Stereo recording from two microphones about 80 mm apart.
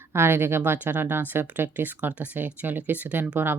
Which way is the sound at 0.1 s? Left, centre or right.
Right.